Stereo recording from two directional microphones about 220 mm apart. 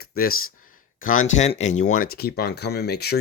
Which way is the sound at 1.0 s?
65° left (ahead or behind).